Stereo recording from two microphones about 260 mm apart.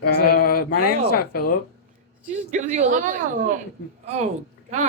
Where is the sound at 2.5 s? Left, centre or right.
Right.